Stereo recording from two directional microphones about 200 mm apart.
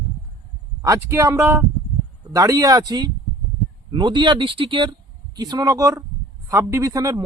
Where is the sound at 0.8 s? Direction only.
15° right (ahead or behind).